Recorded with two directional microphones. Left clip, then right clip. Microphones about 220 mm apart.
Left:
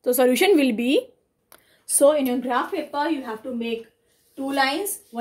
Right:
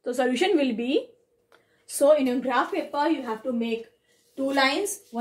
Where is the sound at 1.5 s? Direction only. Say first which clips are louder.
Left 10 dB; 40° left (ahead or behind).